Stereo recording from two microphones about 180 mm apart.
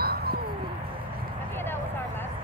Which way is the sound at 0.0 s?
60° right (ahead or behind).